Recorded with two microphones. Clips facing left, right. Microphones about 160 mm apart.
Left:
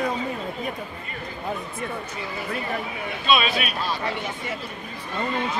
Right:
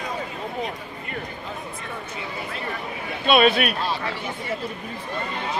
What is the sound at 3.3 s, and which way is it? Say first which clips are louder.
Speech: right 5 dB; 55° right (ahead or behind).